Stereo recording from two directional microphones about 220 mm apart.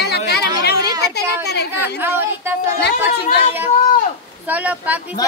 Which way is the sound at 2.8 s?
45° left (ahead or behind).